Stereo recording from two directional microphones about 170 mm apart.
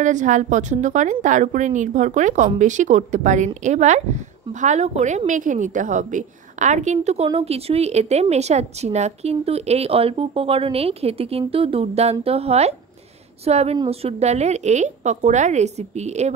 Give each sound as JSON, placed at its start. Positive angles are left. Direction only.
{"t": 0.0, "sound": "a woman's voice", "side_deg": -45}